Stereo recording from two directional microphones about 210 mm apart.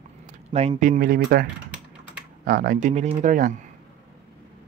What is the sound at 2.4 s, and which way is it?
Speech, 45° right (ahead or behind).